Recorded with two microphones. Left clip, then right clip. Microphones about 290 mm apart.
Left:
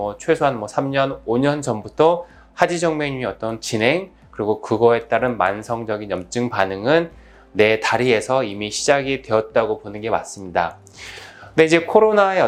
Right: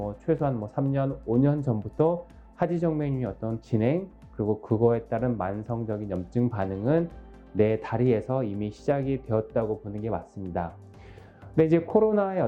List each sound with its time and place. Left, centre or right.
0.3 s speech: centre